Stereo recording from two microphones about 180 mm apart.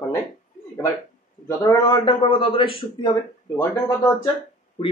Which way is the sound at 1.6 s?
20° left (ahead or behind).